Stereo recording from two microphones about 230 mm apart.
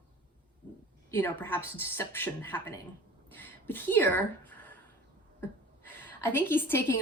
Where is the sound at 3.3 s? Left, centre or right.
Centre.